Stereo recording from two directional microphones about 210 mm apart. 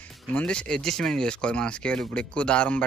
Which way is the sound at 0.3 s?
5° left (ahead or behind).